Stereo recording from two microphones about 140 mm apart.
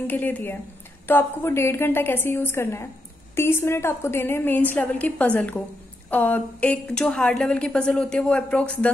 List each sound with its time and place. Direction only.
0.0 s a woman's voice: 10° left (ahead or behind)